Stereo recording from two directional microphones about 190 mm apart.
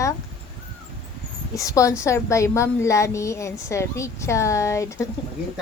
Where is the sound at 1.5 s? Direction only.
15° left (ahead or behind).